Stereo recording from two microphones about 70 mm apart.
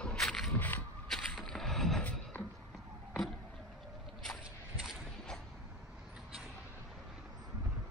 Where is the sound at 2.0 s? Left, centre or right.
Left.